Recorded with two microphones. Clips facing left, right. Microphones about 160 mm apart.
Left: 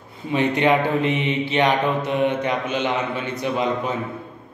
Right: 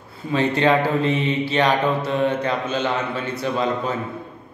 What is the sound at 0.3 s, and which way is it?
A man's voice, 15° left (ahead or behind).